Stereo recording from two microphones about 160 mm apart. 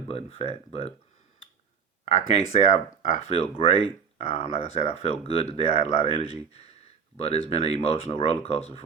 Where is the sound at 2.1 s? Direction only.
40° left (ahead or behind).